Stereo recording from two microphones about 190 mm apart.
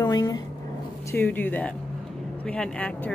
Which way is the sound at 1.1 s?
10° left (ahead or behind).